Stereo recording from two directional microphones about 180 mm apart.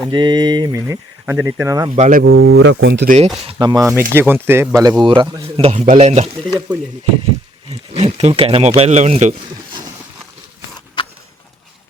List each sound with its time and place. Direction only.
0.1 s speech: 25° right (ahead or behind)
2.0 s speech: 50° right (ahead or behind)
2.3 s speech: 75° right (ahead or behind)
3.4 s speech: 25° right (ahead or behind)
5.5 s speech: 35° right (ahead or behind)
7.7 s speech: 35° right (ahead or behind)
11.0 s a sound: 25° left (ahead or behind)